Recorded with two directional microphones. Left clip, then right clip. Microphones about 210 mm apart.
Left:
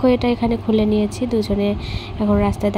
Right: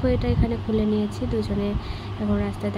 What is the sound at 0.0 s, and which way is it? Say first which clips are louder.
Speech: left 8 dB; 25° left (ahead or behind).